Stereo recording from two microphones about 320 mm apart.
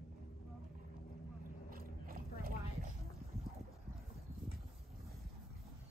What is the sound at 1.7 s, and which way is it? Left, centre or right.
Clip-clop, right.